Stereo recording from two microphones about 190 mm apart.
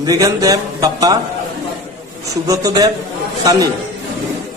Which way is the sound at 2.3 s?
15° right (ahead or behind).